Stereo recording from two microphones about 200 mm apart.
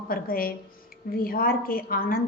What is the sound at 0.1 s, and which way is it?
A woman's voice, 45° left (ahead or behind).